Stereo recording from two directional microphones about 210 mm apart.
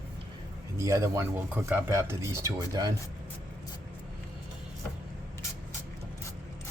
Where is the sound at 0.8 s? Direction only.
15° right (ahead or behind).